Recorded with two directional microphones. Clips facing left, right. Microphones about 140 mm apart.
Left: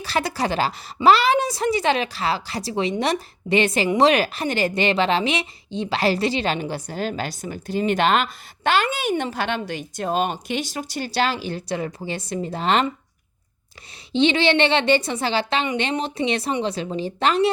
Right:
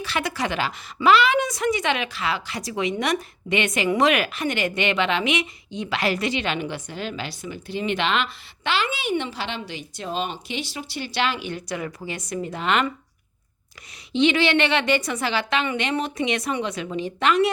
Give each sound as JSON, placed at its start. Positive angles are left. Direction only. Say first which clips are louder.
{"t": 0.0, "sound": "a woman's voice", "louder": "left 3 dB", "side_deg": 35}
{"t": 14.1, "sound": "a woman's voice", "louder": "left 1 dB", "side_deg": 30}